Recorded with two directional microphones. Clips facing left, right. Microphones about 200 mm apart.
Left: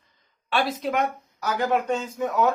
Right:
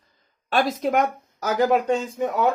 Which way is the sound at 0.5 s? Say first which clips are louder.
Right 4 dB; 45° right (ahead or behind).